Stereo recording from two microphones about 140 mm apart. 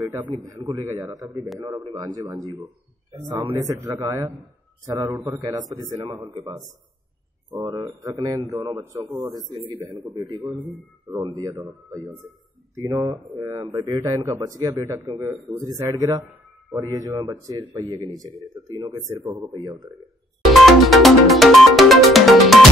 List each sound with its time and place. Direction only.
0.0 s a man's voice: 15° right (ahead or behind)
7.6 s speech: 30° right (ahead or behind)
20.4 s music: centre (ahead or behind)